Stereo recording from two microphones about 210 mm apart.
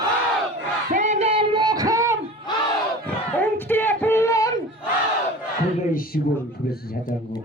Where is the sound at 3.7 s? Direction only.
10° left (ahead or behind).